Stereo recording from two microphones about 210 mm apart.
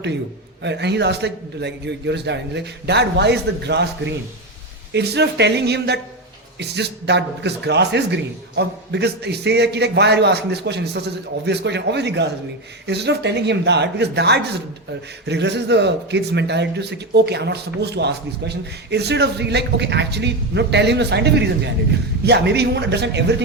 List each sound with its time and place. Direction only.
0.6 s a man's voice: 55° right (ahead or behind)